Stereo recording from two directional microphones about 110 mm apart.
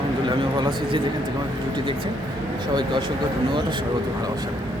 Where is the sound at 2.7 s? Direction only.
45° right (ahead or behind).